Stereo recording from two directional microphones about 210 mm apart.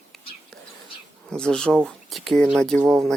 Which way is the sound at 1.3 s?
5° left (ahead or behind).